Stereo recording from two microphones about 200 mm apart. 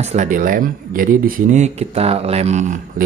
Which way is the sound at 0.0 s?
35° right (ahead or behind).